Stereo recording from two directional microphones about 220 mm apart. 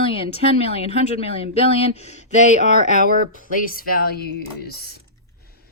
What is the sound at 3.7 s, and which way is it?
Speech, 40° left (ahead or behind).